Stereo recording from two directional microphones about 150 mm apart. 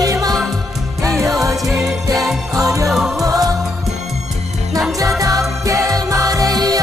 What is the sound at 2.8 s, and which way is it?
Music, centre (ahead or behind).